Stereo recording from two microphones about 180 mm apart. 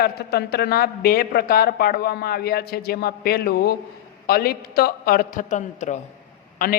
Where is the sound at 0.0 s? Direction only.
60° left (ahead or behind); by 6.0 s 40° left (ahead or behind).